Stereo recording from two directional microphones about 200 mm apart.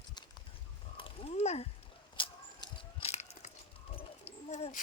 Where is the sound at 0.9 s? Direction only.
25° left (ahead or behind).